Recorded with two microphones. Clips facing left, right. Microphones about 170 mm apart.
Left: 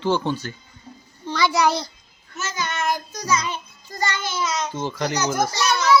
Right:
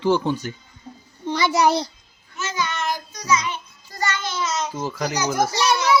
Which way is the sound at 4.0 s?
15° left (ahead or behind).